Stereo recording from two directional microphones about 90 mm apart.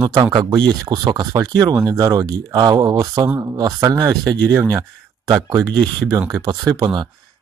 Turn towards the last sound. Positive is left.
turn(degrees=-40)  # may be behind; listen again after turning